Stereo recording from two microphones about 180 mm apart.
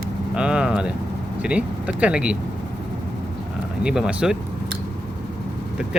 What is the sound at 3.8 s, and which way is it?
Speech, 5° right (ahead or behind).